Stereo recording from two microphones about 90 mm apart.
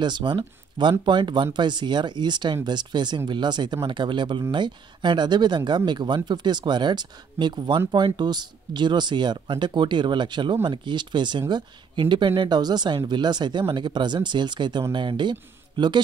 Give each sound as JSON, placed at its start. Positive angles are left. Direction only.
{"t": 0.0, "sound": "speech", "side_deg": -55}